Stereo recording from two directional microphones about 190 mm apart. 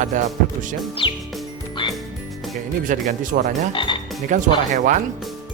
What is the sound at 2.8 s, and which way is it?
Speech, 45° right (ahead or behind).